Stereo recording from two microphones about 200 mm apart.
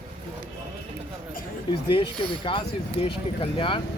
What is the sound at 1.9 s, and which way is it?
Speech, 25° left (ahead or behind).